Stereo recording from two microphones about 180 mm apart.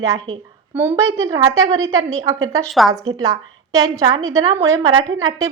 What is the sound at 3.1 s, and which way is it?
A woman's voice, 20° right (ahead or behind).